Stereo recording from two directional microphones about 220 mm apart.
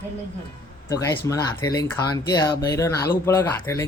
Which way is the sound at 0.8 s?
15° left (ahead or behind).